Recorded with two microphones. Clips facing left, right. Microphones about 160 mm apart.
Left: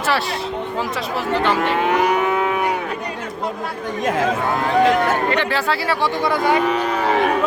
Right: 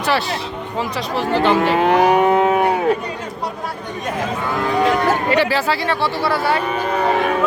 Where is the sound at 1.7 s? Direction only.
30° right (ahead or behind).